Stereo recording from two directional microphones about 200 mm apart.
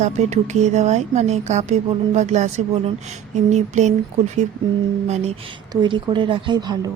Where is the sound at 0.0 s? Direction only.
35° right (ahead or behind).